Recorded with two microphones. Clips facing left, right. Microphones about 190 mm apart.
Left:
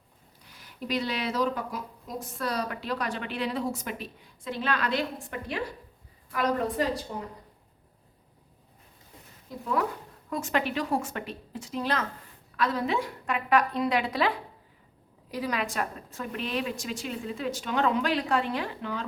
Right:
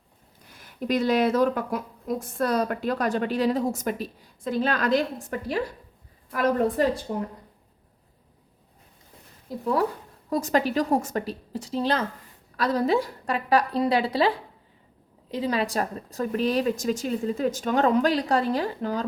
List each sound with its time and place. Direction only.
0.6 s a woman's voice: 50° right (ahead or behind)
9.5 s a woman's voice: 40° right (ahead or behind)